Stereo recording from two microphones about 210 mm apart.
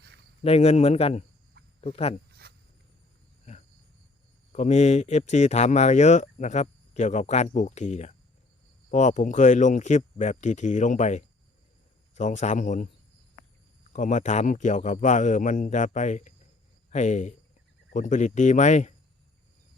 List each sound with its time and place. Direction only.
0.4 s a man's voice: 30° left (ahead or behind)
2.4 s a sound: 50° right (ahead or behind)
4.5 s speech: 35° left (ahead or behind)
13.9 s speech: 35° left (ahead or behind)